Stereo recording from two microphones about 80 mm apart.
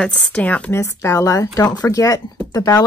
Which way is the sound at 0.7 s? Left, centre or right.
Left.